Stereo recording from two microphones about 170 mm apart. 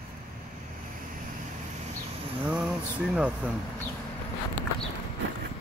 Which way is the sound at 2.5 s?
5° right (ahead or behind).